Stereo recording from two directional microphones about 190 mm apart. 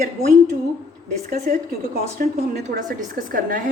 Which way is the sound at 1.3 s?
35° right (ahead or behind).